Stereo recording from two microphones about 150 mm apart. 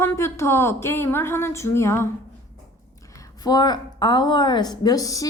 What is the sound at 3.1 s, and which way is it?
A woman's voice, 25° left (ahead or behind).